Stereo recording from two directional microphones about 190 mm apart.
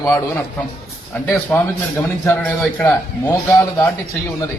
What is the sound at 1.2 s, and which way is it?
A man's voice, 5° left (ahead or behind).